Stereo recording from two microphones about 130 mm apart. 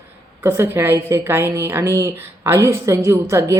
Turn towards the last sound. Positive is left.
turn(degrees=-25)  # may be behind; listen again after turning